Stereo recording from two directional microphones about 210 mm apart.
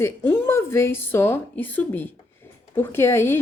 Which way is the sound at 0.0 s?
10° left (ahead or behind).